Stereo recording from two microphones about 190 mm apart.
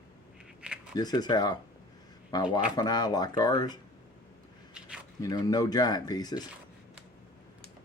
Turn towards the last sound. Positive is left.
turn(degrees=20)  # may be behind; listen again after turning